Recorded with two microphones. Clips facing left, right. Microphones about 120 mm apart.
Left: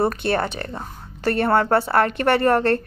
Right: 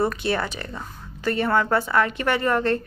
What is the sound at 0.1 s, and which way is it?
A woman's voice, 55° left (ahead or behind).